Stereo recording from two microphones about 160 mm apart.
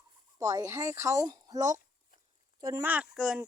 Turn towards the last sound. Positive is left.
turn(degrees=-5)  # may be behind; listen again after turning